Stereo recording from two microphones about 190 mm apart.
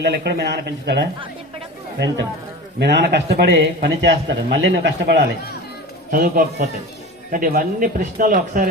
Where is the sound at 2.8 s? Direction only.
60° right (ahead or behind).